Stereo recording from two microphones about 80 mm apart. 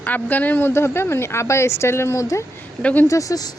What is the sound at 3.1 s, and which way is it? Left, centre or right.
Speech, left.